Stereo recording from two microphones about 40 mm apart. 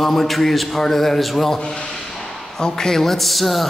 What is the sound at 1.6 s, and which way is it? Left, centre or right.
Speech, left.